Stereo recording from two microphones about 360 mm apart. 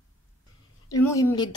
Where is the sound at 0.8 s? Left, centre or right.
Centre.